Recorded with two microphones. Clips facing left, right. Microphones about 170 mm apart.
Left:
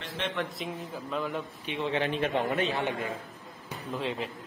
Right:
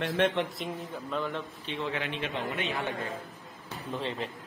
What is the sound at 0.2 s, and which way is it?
Speech, 55° right (ahead or behind).